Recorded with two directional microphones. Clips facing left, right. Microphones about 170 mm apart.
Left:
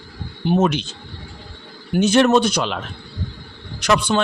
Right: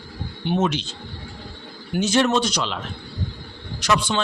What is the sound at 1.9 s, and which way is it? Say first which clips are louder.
Speech: left 5 dB; 60° left (ahead or behind).